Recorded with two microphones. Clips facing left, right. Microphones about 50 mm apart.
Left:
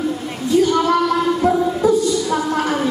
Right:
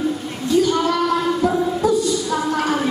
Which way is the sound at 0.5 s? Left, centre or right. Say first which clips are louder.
Left 2 dB; left.